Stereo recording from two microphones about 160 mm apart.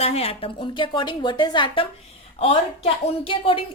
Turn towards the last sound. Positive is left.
turn(degrees=35)  # may be behind; listen again after turning